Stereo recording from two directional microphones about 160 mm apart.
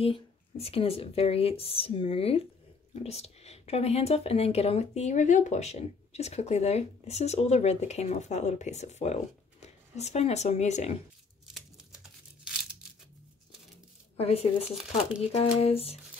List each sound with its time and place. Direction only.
0.0 s speech: 35° left (ahead or behind)
14.1 s speech: 40° left (ahead or behind)